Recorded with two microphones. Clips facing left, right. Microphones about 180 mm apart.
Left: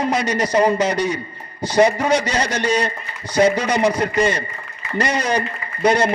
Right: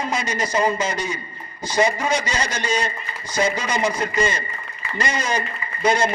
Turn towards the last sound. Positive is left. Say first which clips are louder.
# left 3 dB
turn(degrees=65)  # may be behind; listen again after turning